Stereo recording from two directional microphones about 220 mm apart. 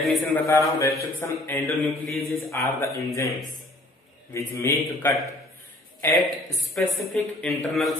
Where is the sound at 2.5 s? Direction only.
15° left (ahead or behind).